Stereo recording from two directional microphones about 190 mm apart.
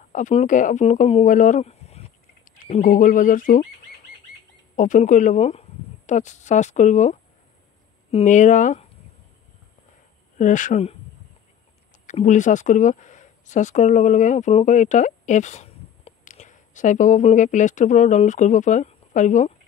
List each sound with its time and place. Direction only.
0.1 s speech: 40° left (ahead or behind)
4.7 s speech: 40° left (ahead or behind)
10.3 s speech: 40° left (ahead or behind)
12.1 s speech: 40° left (ahead or behind)